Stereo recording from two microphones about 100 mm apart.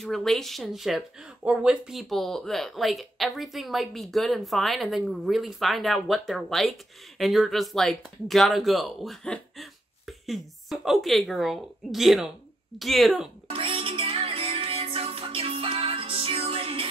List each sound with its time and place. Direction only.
0.0 s speech: 5° left (ahead or behind)
13.5 s music: 60° right (ahead or behind)